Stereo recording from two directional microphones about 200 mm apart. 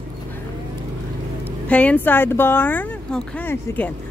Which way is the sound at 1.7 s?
5° left (ahead or behind).